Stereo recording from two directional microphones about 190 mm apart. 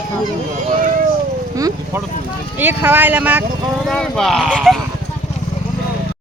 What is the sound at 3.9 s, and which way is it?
Speech, 5° left (ahead or behind).